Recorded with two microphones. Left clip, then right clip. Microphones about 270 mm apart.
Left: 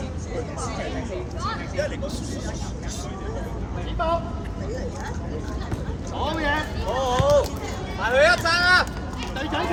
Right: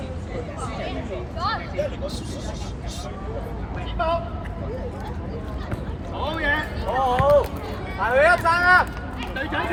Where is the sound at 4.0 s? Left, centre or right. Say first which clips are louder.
Right 1 dB; left.